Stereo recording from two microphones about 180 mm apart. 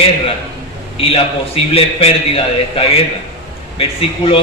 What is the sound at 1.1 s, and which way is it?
A man's voice, 35° left (ahead or behind).